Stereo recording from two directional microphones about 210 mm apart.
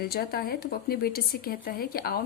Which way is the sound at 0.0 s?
45° left (ahead or behind).